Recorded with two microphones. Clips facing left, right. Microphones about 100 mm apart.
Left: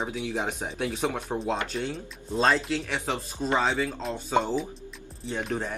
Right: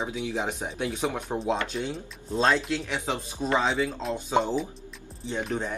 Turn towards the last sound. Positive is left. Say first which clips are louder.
# right 1 dB
turn(degrees=0)  # may be behind; listen again after turning